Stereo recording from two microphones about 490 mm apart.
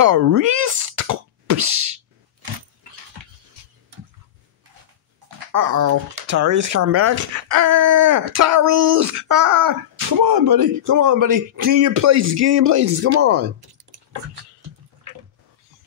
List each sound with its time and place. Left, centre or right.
0.0 s plop: right
5.5 s speech: right
11.9 s speech: right